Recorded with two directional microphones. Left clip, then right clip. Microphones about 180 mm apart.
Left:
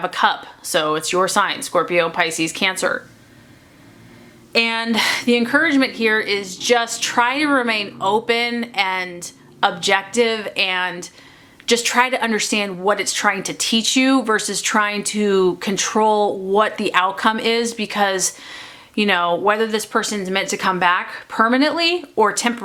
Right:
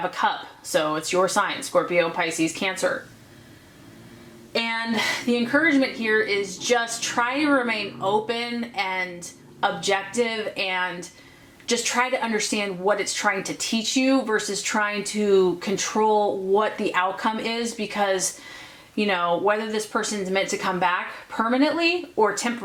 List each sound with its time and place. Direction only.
0.1 s speech: 30° left (ahead or behind)
4.5 s speech: 25° left (ahead or behind)